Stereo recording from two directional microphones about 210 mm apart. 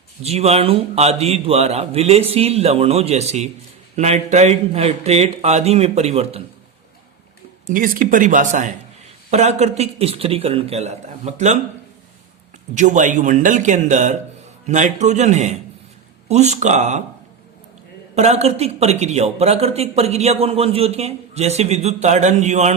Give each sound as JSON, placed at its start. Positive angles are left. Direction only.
{"t": 0.2, "sound": "a man's voice", "side_deg": -30}
{"t": 7.7, "sound": "speech", "side_deg": -40}
{"t": 12.7, "sound": "speech", "side_deg": -35}
{"t": 18.1, "sound": "speech", "side_deg": -30}